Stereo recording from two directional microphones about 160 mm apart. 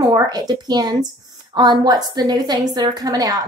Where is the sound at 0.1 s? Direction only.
25° right (ahead or behind).